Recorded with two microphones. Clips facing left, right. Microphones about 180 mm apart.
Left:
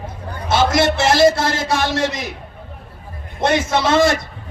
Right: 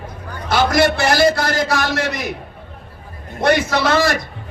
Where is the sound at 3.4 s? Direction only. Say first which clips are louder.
Right 2 dB; 60° right (ahead or behind).